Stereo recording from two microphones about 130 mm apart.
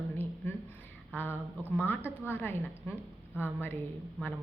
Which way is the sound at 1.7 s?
15° left (ahead or behind).